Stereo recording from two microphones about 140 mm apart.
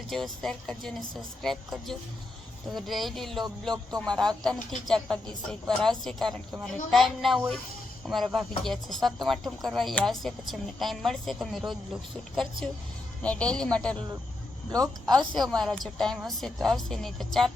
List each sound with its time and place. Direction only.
0.1 s a woman's voice: centre (ahead or behind)
13.2 s speech: 10° left (ahead or behind)
14.7 s speech: 25° right (ahead or behind)
15.3 s a woman's voice: 5° left (ahead or behind)